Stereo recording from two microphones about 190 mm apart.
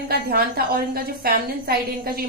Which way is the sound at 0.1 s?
55° right (ahead or behind).